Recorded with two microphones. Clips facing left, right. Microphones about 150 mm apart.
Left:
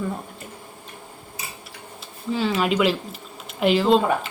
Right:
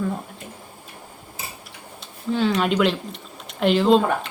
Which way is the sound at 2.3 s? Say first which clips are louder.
Right 1 dB; centre (ahead or behind).